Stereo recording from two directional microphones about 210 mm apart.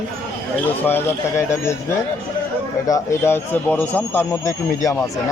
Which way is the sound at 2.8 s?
15° left (ahead or behind).